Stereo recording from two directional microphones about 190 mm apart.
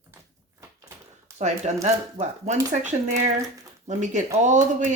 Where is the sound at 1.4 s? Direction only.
35° right (ahead or behind).